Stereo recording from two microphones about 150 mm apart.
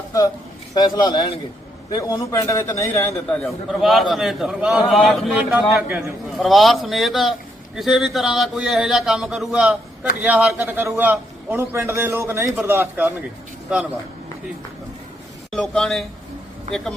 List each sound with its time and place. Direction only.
0.7 s a man's voice: 30° left (ahead or behind)
2.0 s a man's voice: 20° left (ahead or behind)
3.2 s a man's voice: 5° left (ahead or behind); by 13.1 s 15° right (ahead or behind)
13.7 s a man's voice: 5° right (ahead or behind)
15.5 s a man's voice: 5° left (ahead or behind)